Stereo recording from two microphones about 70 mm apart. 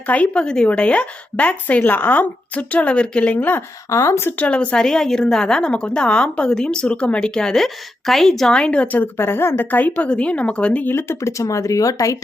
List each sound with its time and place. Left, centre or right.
0.1 s speech: centre
3.8 s speech: left
4.3 s a woman's voice: left; by 8.5 s centre
8.5 s a woman's voice: centre
9.1 s speech: left; by 10.9 s centre
10.9 s speech: left